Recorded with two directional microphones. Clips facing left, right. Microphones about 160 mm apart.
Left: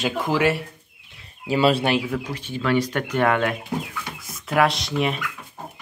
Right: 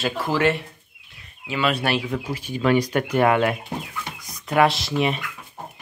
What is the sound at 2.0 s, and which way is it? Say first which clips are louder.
Speech: even; 5° right (ahead or behind).